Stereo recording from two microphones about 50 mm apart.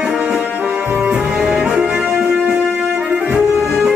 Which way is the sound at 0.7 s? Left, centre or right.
Right.